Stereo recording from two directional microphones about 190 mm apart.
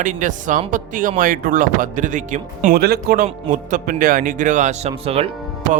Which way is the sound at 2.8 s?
55° right (ahead or behind).